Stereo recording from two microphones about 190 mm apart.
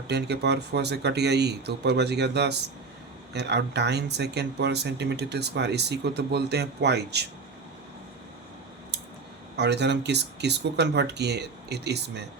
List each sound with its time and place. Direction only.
0.1 s speech: 65° right (ahead or behind)
9.6 s speech: 65° right (ahead or behind)